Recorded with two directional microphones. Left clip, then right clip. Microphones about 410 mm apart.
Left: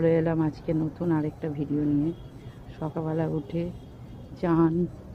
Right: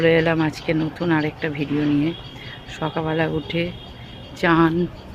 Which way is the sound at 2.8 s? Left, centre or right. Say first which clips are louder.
Right 8 dB; left.